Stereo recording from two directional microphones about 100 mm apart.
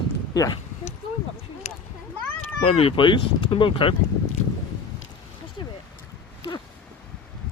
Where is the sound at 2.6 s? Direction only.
70° left (ahead or behind).